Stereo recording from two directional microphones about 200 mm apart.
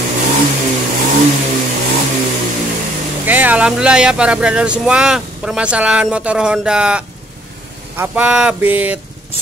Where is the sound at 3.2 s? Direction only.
10° right (ahead or behind).